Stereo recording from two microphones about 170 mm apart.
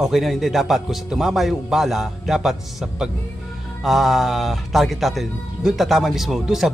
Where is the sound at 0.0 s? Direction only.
Centre (ahead or behind).